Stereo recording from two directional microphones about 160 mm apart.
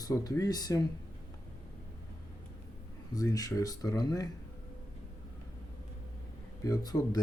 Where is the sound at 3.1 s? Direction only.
20° left (ahead or behind).